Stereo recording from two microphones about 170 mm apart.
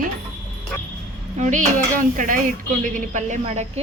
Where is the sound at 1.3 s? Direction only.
45° right (ahead or behind).